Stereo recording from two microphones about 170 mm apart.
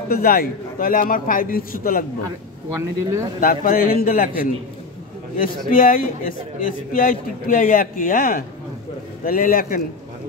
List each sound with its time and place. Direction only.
0.1 s a man's voice: 60° left (ahead or behind)
2.7 s speech: 15° right (ahead or behind)
3.3 s a man's voice: 55° left (ahead or behind)
5.7 s a man's voice: 55° left (ahead or behind)